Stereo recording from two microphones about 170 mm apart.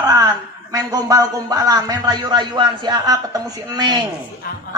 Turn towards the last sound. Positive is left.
turn(degrees=-25)  # may be behind; listen again after turning